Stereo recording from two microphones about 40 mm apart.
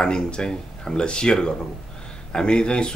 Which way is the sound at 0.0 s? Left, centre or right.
Left.